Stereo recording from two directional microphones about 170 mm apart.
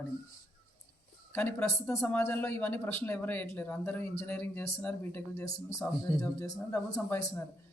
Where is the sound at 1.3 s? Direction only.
10° left (ahead or behind).